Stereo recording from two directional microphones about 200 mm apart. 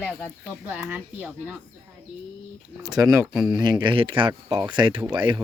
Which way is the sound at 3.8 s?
25° right (ahead or behind).